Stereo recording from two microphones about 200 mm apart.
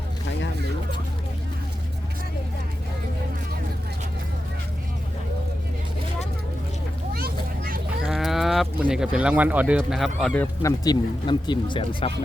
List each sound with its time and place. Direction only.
7.1 s vehicle: 50° right (ahead or behind)
8.0 s speech: centre (ahead or behind); by 12.1 s 25° left (ahead or behind)